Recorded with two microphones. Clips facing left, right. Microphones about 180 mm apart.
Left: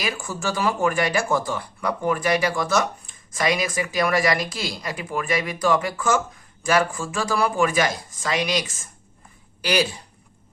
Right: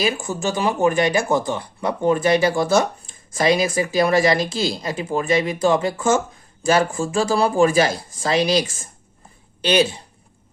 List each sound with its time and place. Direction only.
0.0 s speech: 25° right (ahead or behind)